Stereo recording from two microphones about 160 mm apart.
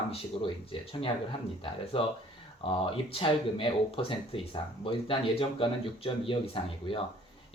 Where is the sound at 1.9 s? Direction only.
35° left (ahead or behind).